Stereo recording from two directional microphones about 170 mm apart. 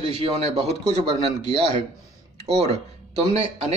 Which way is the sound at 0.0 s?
30° right (ahead or behind).